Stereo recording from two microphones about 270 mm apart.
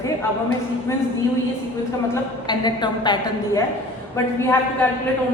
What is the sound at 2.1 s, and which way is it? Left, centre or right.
A woman's voice, centre.